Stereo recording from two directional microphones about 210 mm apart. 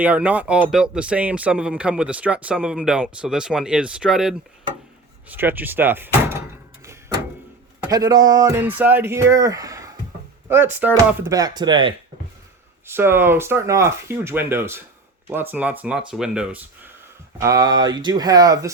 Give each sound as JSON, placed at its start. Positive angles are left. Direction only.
{"t": 0.0, "sound": "speech", "side_deg": -5}
{"t": 7.8, "sound": "speech", "side_deg": -15}
{"t": 12.9, "sound": "speech", "side_deg": -10}